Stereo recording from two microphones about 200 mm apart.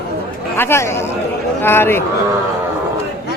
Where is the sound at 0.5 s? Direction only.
10° left (ahead or behind).